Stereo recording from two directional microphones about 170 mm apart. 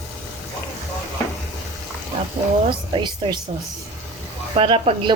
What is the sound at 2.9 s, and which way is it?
Speech, 30° right (ahead or behind).